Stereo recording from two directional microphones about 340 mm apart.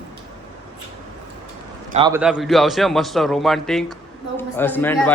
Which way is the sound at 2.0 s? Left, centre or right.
Centre.